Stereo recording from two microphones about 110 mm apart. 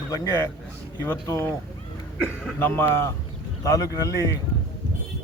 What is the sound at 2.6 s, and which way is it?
Speech, 20° left (ahead or behind).